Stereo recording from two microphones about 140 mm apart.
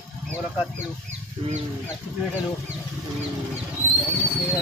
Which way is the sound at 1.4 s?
40° right (ahead or behind).